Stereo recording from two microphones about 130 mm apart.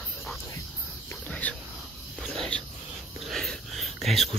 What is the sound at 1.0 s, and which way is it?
Cricket, 10° left (ahead or behind).